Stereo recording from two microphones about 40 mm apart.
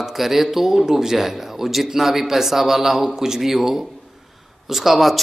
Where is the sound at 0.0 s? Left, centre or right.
Centre.